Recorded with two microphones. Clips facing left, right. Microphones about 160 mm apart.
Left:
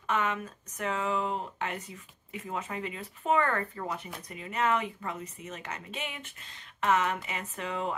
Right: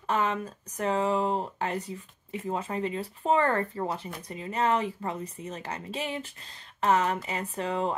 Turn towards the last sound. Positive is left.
turn(degrees=-35)  # may be behind; listen again after turning